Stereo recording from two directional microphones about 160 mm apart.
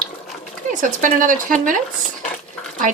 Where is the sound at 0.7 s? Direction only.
55° right (ahead or behind).